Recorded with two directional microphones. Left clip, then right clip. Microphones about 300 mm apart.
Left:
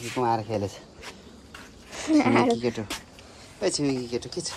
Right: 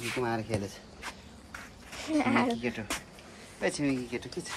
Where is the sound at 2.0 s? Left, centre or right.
Left.